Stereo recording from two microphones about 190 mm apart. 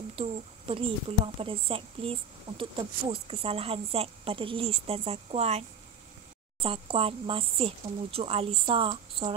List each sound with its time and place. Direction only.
0.1 s a woman's voice: 30° right (ahead or behind)